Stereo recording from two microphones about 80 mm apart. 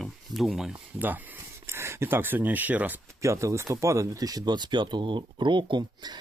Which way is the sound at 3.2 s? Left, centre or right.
Right.